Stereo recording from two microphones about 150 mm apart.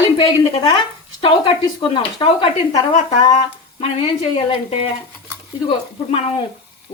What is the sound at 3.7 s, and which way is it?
Speech, 40° left (ahead or behind).